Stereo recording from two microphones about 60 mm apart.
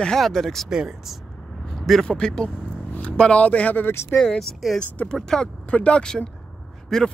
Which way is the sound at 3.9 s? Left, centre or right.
Left.